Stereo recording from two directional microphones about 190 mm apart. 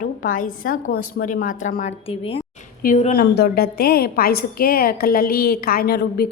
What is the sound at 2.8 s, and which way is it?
A woman's voice, 45° left (ahead or behind).